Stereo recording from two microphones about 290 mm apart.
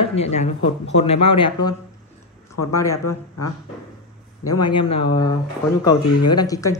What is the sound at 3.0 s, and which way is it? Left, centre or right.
Speech, left.